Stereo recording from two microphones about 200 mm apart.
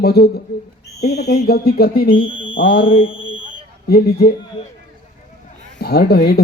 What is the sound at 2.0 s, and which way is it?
Speech, 25° left (ahead or behind).